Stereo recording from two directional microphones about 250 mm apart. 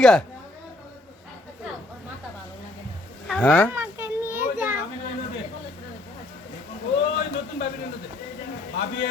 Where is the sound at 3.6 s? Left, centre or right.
Centre.